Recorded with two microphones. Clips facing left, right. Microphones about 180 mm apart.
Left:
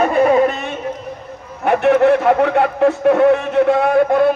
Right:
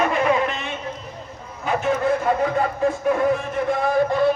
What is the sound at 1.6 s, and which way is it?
A man's voice, 65° left (ahead or behind).